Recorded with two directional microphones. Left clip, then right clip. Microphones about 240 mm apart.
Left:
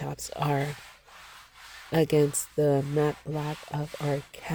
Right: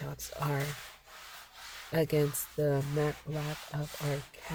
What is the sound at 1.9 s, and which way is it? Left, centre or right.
Speech, left.